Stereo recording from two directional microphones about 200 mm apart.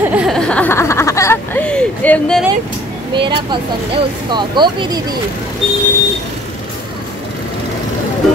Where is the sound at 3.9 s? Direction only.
20° right (ahead or behind).